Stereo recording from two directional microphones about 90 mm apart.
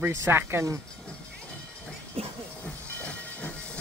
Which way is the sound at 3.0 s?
15° left (ahead or behind).